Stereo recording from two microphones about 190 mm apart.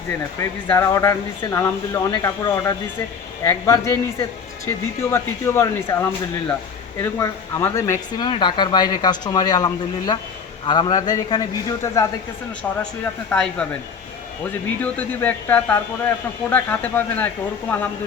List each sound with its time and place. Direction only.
0.3 s speech: 15° left (ahead or behind)
14.8 s speech: 10° left (ahead or behind)